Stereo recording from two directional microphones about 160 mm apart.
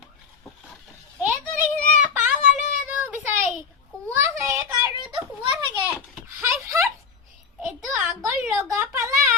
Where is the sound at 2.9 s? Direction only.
15° right (ahead or behind).